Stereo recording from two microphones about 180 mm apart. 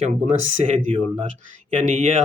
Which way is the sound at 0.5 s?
40° right (ahead or behind).